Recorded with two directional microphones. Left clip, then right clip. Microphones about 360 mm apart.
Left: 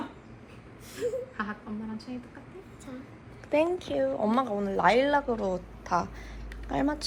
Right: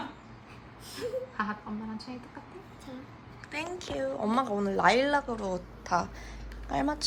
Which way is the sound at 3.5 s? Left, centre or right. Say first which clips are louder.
Left 9 dB; centre.